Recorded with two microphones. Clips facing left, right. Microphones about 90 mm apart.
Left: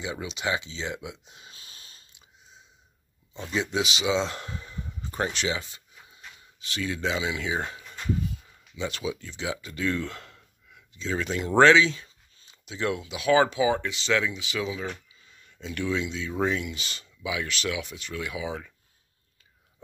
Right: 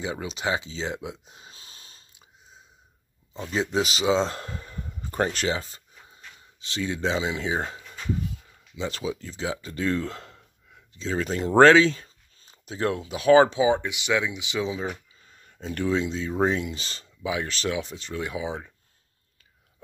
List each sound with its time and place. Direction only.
0.0 s a sound: 35° right (ahead or behind)
3.3 s speech: 35° right (ahead or behind)
6.6 s speech: 30° right (ahead or behind)
7.8 s a sound: centre (ahead or behind)
8.7 s speech: 35° right (ahead or behind)
15.2 s speech: 40° right (ahead or behind)